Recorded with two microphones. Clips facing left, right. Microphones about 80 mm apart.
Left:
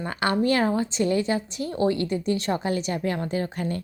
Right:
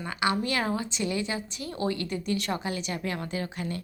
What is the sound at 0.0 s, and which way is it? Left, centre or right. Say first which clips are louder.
A woman's voice: left 4 dB; left.